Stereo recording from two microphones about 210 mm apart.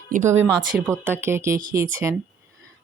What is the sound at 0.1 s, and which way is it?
Speech, 35° right (ahead or behind).